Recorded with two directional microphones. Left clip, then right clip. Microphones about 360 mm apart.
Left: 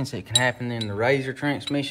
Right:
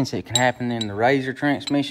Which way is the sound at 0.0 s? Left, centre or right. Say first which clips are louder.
Right 2 dB; right.